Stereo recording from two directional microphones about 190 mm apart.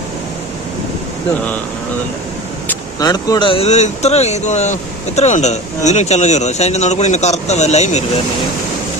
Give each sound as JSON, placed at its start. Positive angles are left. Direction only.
{"t": 3.0, "sound": "speech", "side_deg": 20}